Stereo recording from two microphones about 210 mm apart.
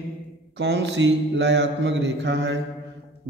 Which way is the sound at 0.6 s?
55° right (ahead or behind).